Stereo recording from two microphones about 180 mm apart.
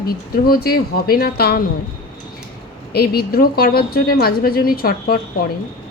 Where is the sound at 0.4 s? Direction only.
55° left (ahead or behind).